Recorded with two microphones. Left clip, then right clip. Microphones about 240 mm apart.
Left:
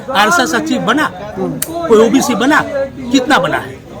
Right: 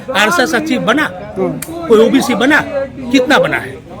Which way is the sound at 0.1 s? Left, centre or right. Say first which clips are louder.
Left 1 dB; centre.